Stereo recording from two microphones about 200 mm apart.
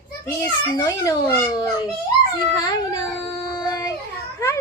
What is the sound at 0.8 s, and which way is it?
A child's voice, 15° left (ahead or behind).